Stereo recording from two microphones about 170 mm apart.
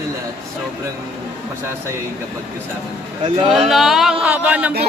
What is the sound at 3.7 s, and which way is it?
Speech, centre (ahead or behind).